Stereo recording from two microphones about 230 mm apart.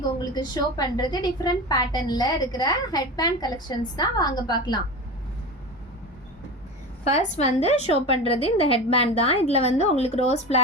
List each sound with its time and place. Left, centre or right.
0.3 s a woman's voice: centre
7.0 s a woman's voice: left